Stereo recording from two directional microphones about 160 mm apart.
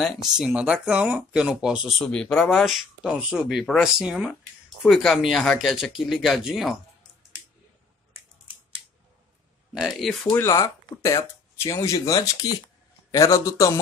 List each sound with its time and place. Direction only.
0.0 s speech: centre (ahead or behind)
9.8 s speech: centre (ahead or behind)
10.3 s speech: 20° left (ahead or behind)